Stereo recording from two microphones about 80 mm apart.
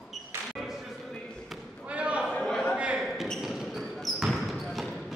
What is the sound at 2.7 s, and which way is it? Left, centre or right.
Basketball bounce, centre.